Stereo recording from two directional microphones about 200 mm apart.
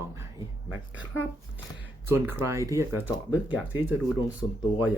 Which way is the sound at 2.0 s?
10° right (ahead or behind).